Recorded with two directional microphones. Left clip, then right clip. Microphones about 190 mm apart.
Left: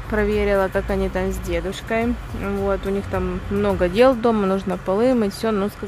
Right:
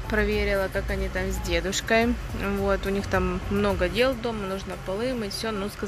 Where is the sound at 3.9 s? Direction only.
25° left (ahead or behind).